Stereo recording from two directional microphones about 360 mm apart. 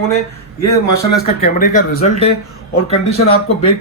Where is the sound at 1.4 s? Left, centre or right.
Left.